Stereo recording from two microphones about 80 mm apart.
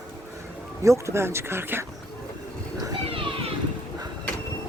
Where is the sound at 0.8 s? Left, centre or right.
Right.